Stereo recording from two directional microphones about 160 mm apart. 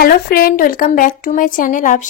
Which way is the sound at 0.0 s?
70° left (ahead or behind).